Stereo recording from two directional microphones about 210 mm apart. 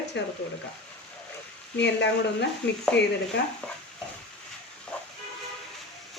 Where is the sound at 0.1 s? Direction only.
55° left (ahead or behind).